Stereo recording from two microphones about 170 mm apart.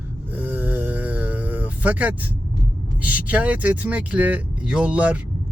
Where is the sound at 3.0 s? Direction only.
10° right (ahead or behind).